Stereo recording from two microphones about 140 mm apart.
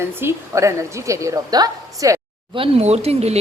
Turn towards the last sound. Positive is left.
turn(degrees=-50)  # may be behind; listen again after turning